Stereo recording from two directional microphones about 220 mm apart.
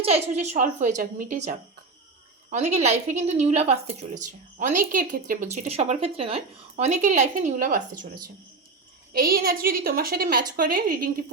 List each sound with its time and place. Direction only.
0.0 s speech: 30° right (ahead or behind)
4.1 s speech: 90° right
4.6 s speech: 35° right (ahead or behind)
9.1 s speech: 45° right (ahead or behind)